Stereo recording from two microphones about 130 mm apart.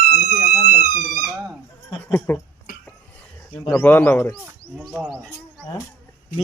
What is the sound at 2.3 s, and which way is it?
Speech, 15° left (ahead or behind).